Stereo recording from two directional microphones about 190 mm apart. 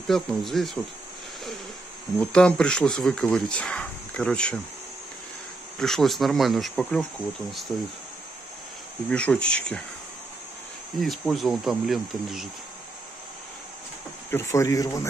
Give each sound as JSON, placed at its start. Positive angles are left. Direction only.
{"t": 0.0, "sound": "speech", "side_deg": 0}
{"t": 2.1, "sound": "speech", "side_deg": 5}
{"t": 5.8, "sound": "speech", "side_deg": 0}
{"t": 9.1, "sound": "speech", "side_deg": 5}
{"t": 11.0, "sound": "speech", "side_deg": 0}
{"t": 14.3, "sound": "speech", "side_deg": 15}